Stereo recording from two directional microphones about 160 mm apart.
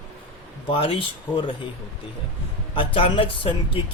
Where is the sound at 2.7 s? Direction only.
35° left (ahead or behind).